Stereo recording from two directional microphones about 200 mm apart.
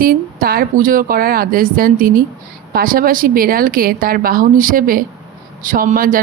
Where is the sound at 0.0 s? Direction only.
45° right (ahead or behind).